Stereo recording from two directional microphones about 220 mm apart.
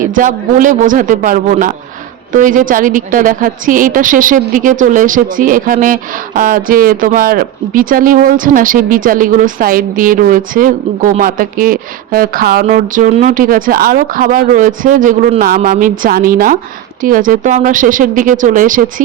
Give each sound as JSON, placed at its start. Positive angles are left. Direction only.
{"t": 0.0, "sound": "a woman's voice", "side_deg": -35}